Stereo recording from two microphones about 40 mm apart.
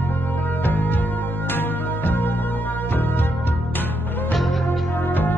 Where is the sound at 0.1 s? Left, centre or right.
Left.